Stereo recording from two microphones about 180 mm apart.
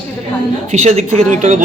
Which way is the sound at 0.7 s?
35° right (ahead or behind).